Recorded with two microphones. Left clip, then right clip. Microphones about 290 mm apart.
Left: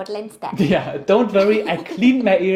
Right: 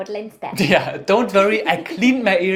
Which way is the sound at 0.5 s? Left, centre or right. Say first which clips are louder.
Right 3 dB; right.